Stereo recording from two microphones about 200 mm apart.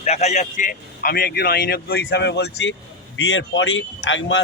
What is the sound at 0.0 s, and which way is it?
A man's voice, 35° left (ahead or behind).